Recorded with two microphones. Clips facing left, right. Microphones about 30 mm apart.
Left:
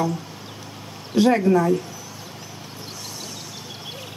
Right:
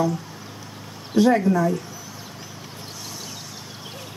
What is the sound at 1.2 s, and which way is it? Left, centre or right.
Speech, left.